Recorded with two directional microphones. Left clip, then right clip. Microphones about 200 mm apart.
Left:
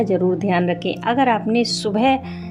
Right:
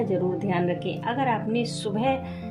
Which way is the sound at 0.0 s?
50° left (ahead or behind).